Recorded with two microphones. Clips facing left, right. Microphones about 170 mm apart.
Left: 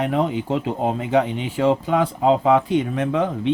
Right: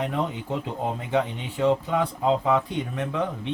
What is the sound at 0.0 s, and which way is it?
Speech, 90° left.